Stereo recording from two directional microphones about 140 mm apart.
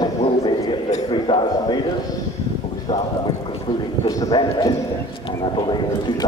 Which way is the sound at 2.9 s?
25° left (ahead or behind).